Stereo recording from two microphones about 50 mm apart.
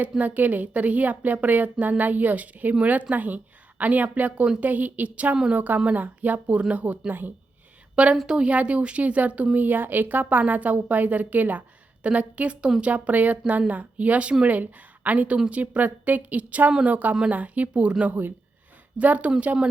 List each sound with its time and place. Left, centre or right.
0.2 s speech: right
8.0 s a woman's voice: right
18.9 s a woman's voice: right